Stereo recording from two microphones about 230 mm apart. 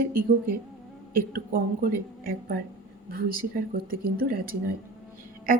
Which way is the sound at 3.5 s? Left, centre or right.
Right.